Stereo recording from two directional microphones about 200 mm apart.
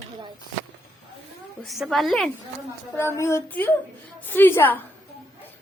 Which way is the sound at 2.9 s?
15° left (ahead or behind).